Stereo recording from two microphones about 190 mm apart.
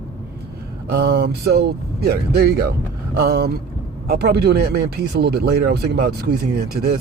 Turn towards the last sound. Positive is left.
turn(degrees=-55)  # may be behind; listen again after turning